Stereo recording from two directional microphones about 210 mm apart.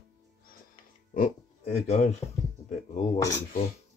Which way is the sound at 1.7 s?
30° left (ahead or behind).